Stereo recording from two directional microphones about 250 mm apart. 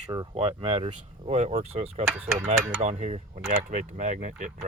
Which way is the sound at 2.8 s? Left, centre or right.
Right.